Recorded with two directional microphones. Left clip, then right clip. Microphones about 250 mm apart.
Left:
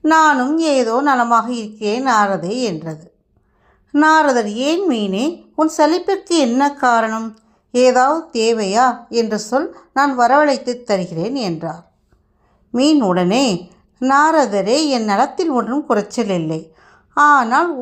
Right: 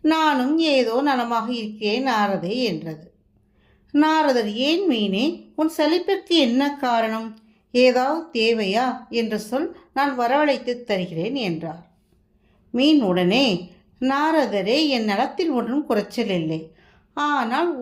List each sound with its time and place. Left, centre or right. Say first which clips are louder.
0.0 s speech: left 7 dB; centre
12.7 s speech: left 4 dB; centre